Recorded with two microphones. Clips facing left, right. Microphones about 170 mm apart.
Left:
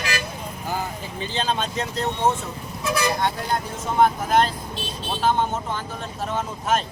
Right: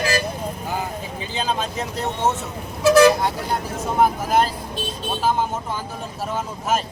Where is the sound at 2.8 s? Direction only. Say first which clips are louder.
Right 11 dB; 85° right.